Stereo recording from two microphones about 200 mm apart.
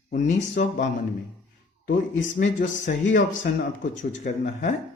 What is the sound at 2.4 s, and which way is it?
Speech, 40° left (ahead or behind).